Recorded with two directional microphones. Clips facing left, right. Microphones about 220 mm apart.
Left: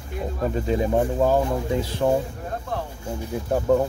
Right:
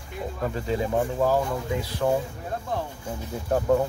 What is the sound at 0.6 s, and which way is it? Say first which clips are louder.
Speech: left 4 dB; 20° left (ahead or behind).